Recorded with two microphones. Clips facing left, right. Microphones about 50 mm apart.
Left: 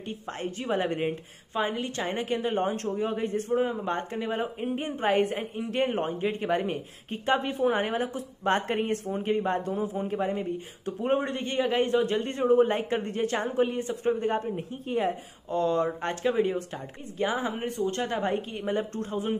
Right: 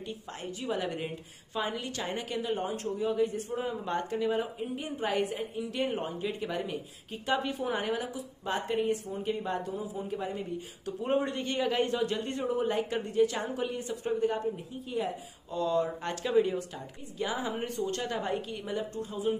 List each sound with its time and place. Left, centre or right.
0.0 s a man's voice: left
3.5 s a man's voice: left
9.1 s a man's voice: left
10.1 s a man's voice: left
18.9 s speech: left